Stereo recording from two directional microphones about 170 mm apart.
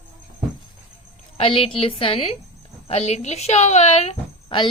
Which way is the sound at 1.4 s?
35° left (ahead or behind).